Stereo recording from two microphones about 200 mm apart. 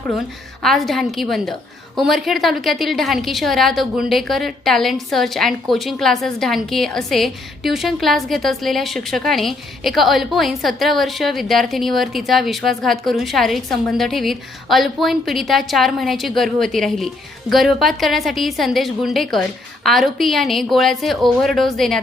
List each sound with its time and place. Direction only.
0.6 s a woman's voice: centre (ahead or behind)